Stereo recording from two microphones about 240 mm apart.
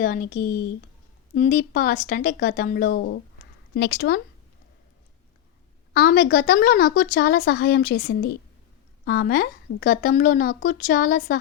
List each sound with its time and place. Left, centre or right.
0.0 s a woman's voice: left
5.9 s a woman's voice: left